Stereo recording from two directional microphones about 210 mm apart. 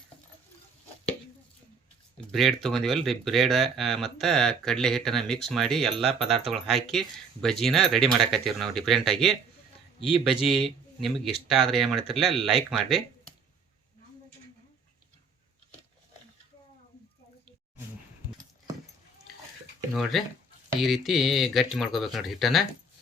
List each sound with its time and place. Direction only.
2.3 s speech: centre (ahead or behind)
10.0 s speech: 25° left (ahead or behind)
10.4 s speech: centre (ahead or behind)
19.9 s speech: centre (ahead or behind)